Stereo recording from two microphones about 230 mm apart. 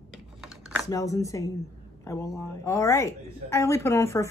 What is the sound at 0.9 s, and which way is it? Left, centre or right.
Speech, centre.